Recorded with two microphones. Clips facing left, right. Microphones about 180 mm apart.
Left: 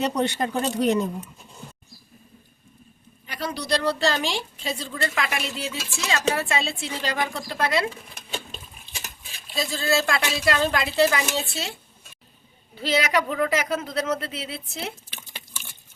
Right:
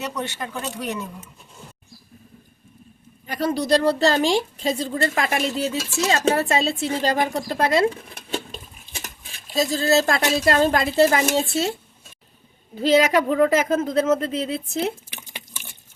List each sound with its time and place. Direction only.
0.0 s speech: 35° left (ahead or behind)
3.2 s a woman's voice: 45° right (ahead or behind)
9.5 s a woman's voice: 40° right (ahead or behind)
12.7 s a woman's voice: 40° right (ahead or behind)